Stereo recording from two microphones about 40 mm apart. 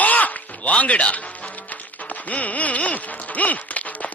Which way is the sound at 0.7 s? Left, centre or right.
Left.